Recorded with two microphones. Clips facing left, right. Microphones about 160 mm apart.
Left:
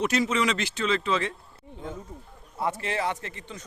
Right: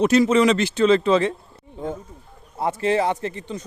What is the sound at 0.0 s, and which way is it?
A man's voice, 35° right (ahead or behind).